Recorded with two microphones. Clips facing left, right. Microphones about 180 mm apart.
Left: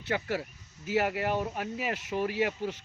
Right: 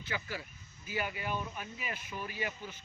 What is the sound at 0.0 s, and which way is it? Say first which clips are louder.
Speech: left 9 dB; 70° left (ahead or behind).